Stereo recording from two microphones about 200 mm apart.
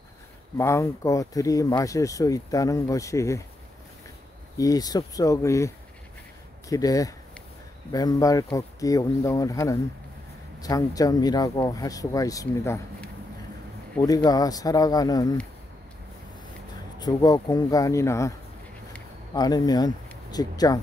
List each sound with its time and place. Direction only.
0.6 s speech: 15° left (ahead or behind)
4.6 s speech: 20° left (ahead or behind)
6.7 s speech: 15° left (ahead or behind)
17.0 s speech: 20° left (ahead or behind)
19.3 s speech: 20° left (ahead or behind)